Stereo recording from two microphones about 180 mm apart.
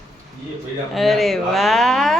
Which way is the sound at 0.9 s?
Centre (ahead or behind).